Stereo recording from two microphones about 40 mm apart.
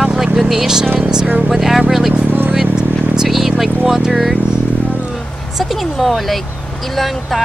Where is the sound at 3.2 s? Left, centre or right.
Centre.